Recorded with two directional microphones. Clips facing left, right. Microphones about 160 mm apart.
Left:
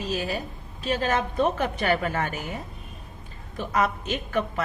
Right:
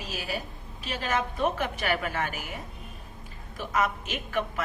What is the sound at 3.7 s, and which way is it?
Speech, 40° left (ahead or behind).